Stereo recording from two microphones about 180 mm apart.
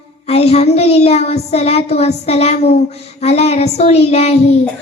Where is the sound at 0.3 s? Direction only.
35° left (ahead or behind).